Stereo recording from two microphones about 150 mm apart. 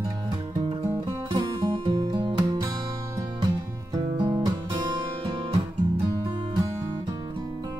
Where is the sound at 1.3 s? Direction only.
30° right (ahead or behind).